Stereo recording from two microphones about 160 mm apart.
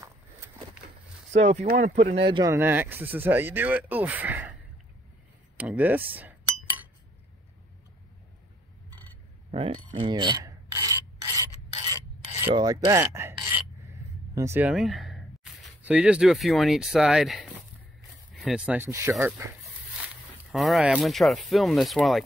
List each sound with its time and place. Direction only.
1.3 s speech: 45° right (ahead or behind)
2.2 s speech: 25° right (ahead or behind); by 4.6 s 10° right (ahead or behind)
5.6 s chink: 10° right (ahead or behind)
9.5 s filing: 35° right (ahead or behind)
12.5 s rub: 25° right (ahead or behind)
14.3 s speech: 15° right (ahead or behind)
14.7 s a sound: centre (ahead or behind)
15.8 s speech: 5° right (ahead or behind)
20.5 s speech: centre (ahead or behind)